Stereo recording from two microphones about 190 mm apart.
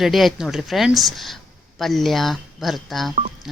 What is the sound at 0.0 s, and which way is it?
A woman's voice, centre (ahead or behind).